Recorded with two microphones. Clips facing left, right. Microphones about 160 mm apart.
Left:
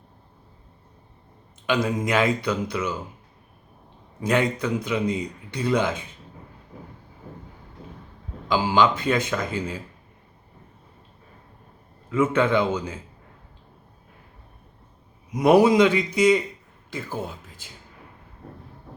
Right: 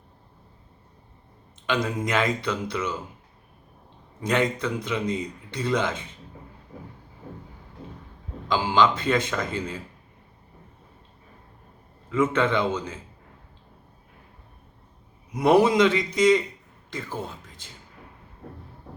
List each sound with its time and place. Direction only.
1.6 s a man's voice: 10° left (ahead or behind)
4.2 s a man's voice: 10° left (ahead or behind)
8.4 s a man's voice: 10° left (ahead or behind)
12.1 s a man's voice: 10° left (ahead or behind)
15.4 s a man's voice: 10° left (ahead or behind)